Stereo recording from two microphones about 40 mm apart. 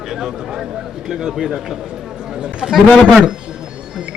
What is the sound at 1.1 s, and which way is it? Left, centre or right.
Speech, centre.